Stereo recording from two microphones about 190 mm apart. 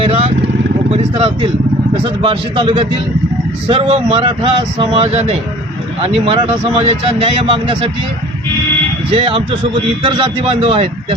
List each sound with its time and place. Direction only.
0.0 s vehicle: 30° right (ahead or behind)
2.0 s speech: 25° right (ahead or behind)
9.0 s speech: 30° right (ahead or behind)